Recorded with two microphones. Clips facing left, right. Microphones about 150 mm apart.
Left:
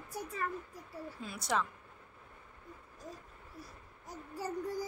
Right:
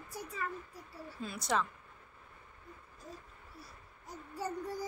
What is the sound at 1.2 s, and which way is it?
Speech, 10° left (ahead or behind).